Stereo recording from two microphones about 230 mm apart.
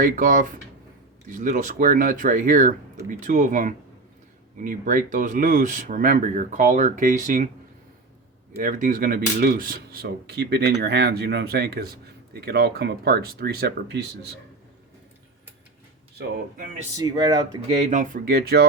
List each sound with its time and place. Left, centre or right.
0.0 s speech: right
8.5 s speech: right
16.1 s speech: right
17.0 s speech: centre; by 18.7 s right